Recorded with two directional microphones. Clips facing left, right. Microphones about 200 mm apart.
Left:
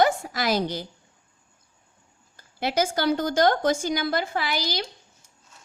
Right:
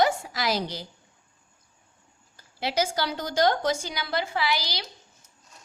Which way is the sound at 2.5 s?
50° left (ahead or behind).